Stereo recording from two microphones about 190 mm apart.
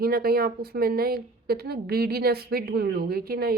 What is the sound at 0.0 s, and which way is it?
Speech, 55° right (ahead or behind).